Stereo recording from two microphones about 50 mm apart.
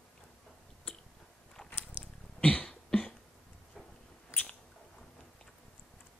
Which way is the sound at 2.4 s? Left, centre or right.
Left.